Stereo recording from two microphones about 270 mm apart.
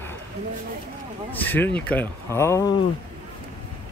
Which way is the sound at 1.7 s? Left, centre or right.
Centre.